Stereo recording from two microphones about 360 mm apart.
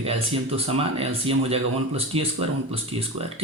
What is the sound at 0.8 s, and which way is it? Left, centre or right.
Speech, centre.